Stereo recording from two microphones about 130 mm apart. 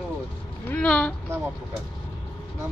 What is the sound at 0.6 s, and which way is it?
Speech, 10° left (ahead or behind).